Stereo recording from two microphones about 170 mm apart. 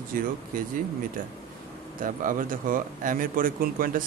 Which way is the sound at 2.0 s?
55° right (ahead or behind).